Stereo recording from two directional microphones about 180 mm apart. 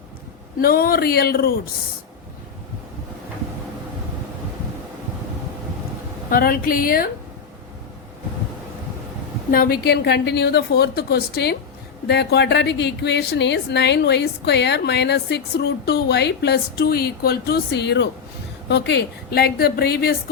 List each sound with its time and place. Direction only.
0.6 s a woman's voice: 55° left (ahead or behind)
6.3 s a woman's voice: 55° left (ahead or behind)
9.5 s a woman's voice: 55° left (ahead or behind)